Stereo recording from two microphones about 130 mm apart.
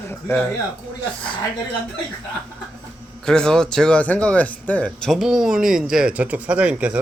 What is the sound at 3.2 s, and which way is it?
Speech, 5° left (ahead or behind).